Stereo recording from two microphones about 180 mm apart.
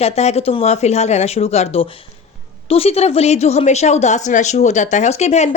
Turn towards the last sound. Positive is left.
turn(degrees=40)  # may be behind; listen again after turning